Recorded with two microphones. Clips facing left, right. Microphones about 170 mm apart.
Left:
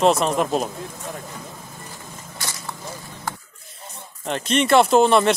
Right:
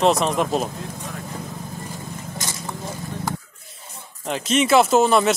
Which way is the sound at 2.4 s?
15° right (ahead or behind).